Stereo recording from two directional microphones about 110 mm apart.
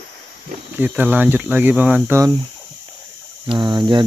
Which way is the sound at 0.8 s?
15° right (ahead or behind).